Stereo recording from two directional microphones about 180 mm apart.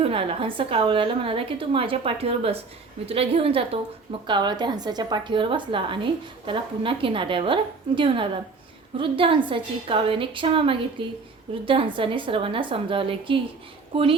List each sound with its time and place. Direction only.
0.0 s a woman's voice: 30° right (ahead or behind)